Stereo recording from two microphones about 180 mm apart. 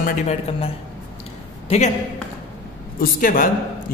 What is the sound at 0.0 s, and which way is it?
Speech, 40° left (ahead or behind).